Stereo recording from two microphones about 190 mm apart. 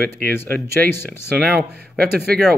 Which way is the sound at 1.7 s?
60° right (ahead or behind).